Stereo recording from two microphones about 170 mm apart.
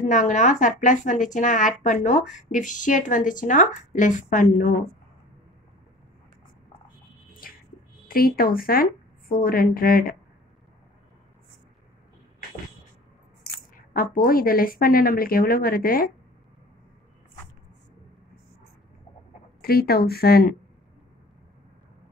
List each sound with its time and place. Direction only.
0.0 s speech: 45° left (ahead or behind)
7.4 s a sound: 60° left (ahead or behind)
8.1 s a woman's voice: 60° left (ahead or behind)
13.7 s a woman's voice: 60° left (ahead or behind)
19.6 s a woman's voice: 65° left (ahead or behind)